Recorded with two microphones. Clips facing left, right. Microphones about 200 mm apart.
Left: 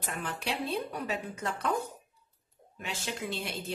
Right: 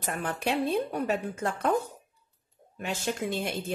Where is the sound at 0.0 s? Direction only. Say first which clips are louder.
Right 6 dB; 55° right (ahead or behind).